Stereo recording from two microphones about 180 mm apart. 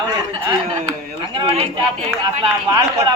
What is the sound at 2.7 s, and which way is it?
Speech, 20° right (ahead or behind).